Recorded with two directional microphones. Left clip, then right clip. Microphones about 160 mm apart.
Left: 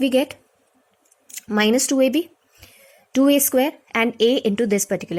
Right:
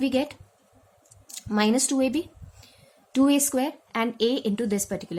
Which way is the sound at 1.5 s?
45° left (ahead or behind).